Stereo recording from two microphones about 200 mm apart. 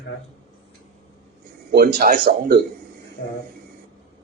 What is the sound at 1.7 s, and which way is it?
Speech, 45° right (ahead or behind).